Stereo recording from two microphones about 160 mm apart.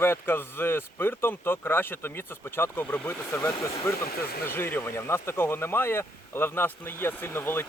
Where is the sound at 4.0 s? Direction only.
70° left (ahead or behind).